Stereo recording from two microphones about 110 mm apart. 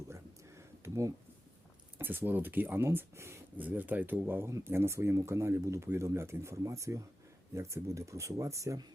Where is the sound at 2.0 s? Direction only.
20° right (ahead or behind).